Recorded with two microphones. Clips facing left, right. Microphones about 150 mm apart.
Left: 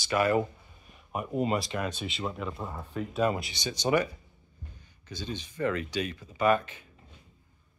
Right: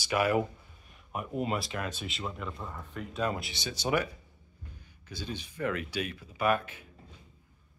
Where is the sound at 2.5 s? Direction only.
30° left (ahead or behind).